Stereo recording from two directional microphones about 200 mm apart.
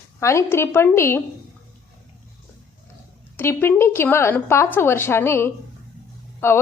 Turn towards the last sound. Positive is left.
turn(degrees=10)  # may be behind; listen again after turning